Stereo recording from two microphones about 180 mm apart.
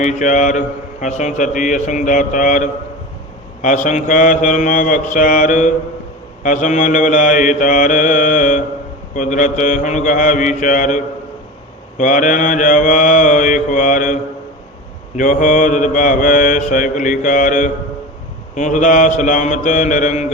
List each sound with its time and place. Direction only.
0.0 s a man's voice: 40° left (ahead or behind)